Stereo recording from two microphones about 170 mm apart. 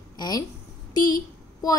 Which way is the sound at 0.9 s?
20° left (ahead or behind).